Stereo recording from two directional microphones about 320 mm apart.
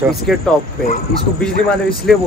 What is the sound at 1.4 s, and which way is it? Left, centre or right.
Speech, centre.